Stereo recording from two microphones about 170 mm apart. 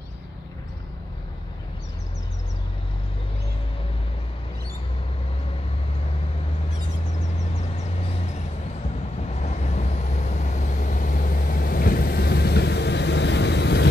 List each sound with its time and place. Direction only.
9.3 s vehicle: 40° left (ahead or behind); by 13.8 s 90° left